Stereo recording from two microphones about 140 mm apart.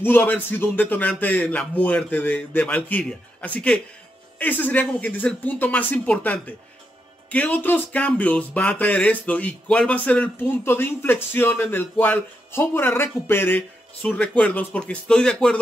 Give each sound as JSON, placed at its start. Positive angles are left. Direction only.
{"t": 0.0, "sound": "speech", "side_deg": 15}